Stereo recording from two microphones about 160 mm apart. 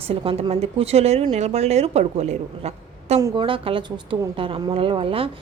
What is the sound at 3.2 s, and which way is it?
Speech, 30° right (ahead or behind).